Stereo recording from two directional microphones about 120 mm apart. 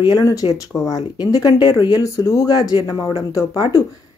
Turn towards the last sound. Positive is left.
turn(degrees=30)  # may be behind; listen again after turning